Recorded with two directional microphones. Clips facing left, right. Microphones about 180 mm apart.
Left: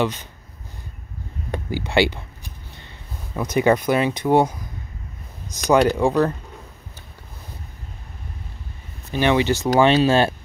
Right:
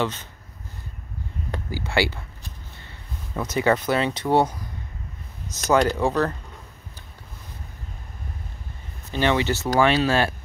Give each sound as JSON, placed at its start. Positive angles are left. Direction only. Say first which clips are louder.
{"t": 0.0, "sound": "speech", "louder": "left 3 dB", "side_deg": 15}
{"t": 1.5, "sound": "speech", "louder": "left 4 dB", "side_deg": 20}
{"t": 3.3, "sound": "speech", "louder": "left 4 dB", "side_deg": 15}
{"t": 9.1, "sound": "speech", "louder": "left 3 dB", "side_deg": 15}